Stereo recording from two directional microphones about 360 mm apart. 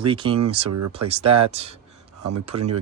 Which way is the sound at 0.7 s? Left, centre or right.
Right.